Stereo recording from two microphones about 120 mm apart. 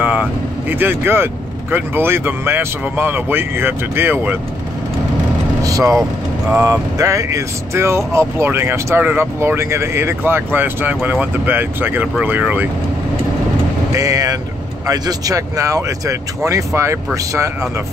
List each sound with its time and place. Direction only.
0.0 s speech: 10° right (ahead or behind)
5.6 s vehicle: 30° right (ahead or behind)
6.6 s speech: 25° right (ahead or behind)
13.9 s speech: 30° right (ahead or behind)